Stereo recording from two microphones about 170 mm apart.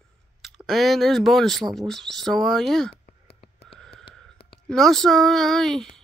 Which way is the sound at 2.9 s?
35° left (ahead or behind).